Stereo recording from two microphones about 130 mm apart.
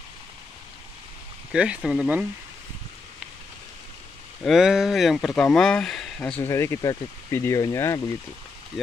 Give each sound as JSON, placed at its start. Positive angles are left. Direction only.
{"t": 1.5, "sound": "speech", "side_deg": -10}
{"t": 4.5, "sound": "speech", "side_deg": -5}
{"t": 6.4, "sound": "speech", "side_deg": 20}